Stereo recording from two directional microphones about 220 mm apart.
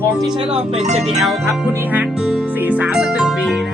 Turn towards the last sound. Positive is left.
turn(degrees=0)  # may be behind; listen again after turning